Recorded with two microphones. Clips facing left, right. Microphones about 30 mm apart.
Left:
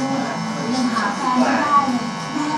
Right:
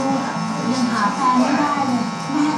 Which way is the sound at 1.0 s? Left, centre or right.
Centre.